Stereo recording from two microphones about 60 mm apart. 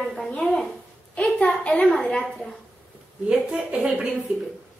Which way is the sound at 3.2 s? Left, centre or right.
Centre.